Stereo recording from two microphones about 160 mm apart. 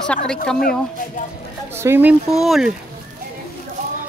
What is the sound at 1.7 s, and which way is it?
Speech, 15° right (ahead or behind).